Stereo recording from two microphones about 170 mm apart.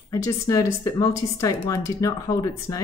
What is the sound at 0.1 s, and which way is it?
Speech, 20° left (ahead or behind).